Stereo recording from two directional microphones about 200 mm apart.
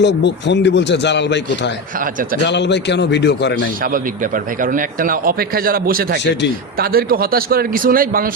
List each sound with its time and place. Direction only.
0.0 s speech: 60° left (ahead or behind)
4.6 s speech: 45° right (ahead or behind)